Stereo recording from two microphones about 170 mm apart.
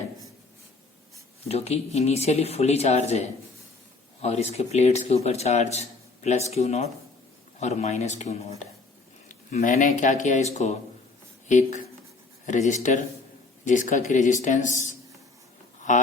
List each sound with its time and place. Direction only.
1.5 s a man's voice: 40° left (ahead or behind)